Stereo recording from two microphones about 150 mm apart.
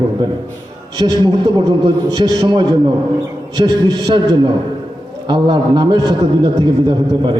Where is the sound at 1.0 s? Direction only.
35° right (ahead or behind).